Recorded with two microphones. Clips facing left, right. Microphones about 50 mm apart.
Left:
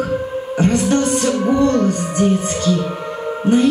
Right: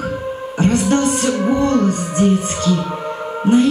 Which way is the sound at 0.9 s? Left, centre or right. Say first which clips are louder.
Even; right.